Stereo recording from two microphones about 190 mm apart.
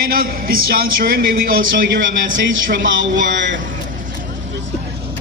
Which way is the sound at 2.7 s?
75° right (ahead or behind).